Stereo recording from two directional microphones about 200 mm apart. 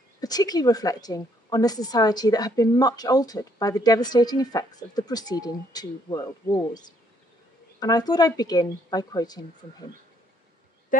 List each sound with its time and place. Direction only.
0.2 s a woman's voice: 20° left (ahead or behind)
10.9 s speech: 40° left (ahead or behind)